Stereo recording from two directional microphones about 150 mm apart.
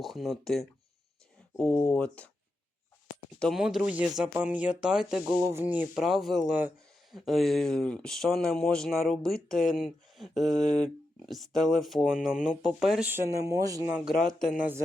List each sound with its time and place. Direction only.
0.0 s speech: centre (ahead or behind)
3.3 s speech: 5° left (ahead or behind)
5.3 s speech: 20° right (ahead or behind)
6.1 s speech: centre (ahead or behind)
13.1 s speech: 15° right (ahead or behind)
14.3 s speech: 5° right (ahead or behind)